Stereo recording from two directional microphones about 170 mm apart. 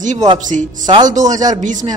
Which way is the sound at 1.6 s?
45° right (ahead or behind).